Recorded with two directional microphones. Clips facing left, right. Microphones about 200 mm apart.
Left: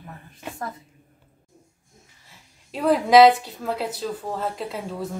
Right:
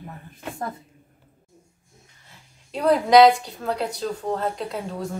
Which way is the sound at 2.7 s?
5° left (ahead or behind).